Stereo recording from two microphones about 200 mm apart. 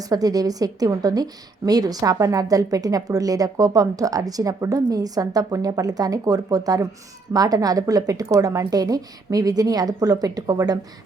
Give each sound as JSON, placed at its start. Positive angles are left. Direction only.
{"t": 0.0, "sound": "a woman's voice", "side_deg": -20}